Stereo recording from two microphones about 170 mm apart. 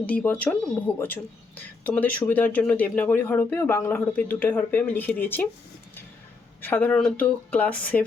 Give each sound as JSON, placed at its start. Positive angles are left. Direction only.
{"t": 0.0, "sound": "speech", "side_deg": 10}
{"t": 6.6, "sound": "speech", "side_deg": 10}